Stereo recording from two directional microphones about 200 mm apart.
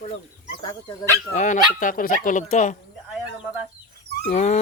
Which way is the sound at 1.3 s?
40° left (ahead or behind).